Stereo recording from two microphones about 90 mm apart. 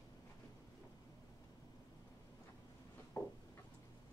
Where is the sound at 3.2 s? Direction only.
30° left (ahead or behind).